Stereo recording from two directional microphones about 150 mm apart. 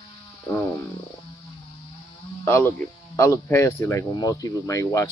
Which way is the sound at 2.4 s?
15° left (ahead or behind).